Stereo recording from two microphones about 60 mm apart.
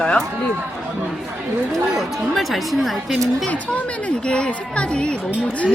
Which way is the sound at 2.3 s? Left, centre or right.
Centre.